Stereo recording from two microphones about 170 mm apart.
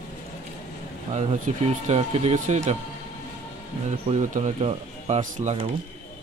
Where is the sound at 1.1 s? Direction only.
45° right (ahead or behind).